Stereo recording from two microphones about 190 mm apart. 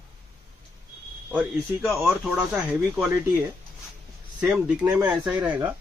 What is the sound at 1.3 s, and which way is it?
Speech, centre (ahead or behind).